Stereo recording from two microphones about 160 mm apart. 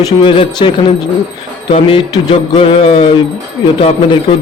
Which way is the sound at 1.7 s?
35° left (ahead or behind).